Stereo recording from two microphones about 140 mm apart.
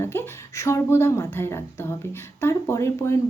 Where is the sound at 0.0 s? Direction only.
15° left (ahead or behind).